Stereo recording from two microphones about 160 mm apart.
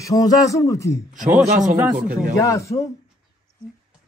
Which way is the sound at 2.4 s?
20° left (ahead or behind).